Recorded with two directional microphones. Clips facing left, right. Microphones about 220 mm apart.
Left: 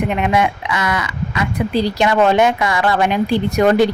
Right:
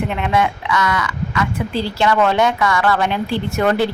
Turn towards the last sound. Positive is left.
turn(degrees=15)  # may be behind; listen again after turning